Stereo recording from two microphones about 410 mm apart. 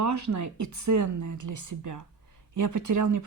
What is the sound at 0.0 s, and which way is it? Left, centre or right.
Speech, right.